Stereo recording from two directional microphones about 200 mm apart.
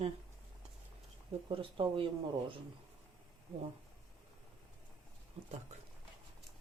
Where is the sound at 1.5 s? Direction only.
25° right (ahead or behind).